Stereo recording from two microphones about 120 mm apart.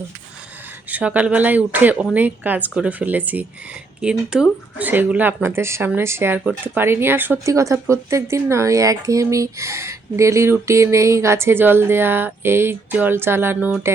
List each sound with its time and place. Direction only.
0.9 s speech: 10° right (ahead or behind)